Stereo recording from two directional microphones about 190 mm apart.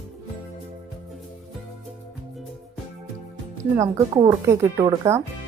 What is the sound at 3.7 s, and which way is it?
Speech, 15° right (ahead or behind).